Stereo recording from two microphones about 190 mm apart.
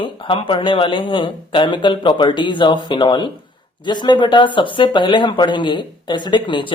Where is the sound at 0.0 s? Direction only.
25° left (ahead or behind).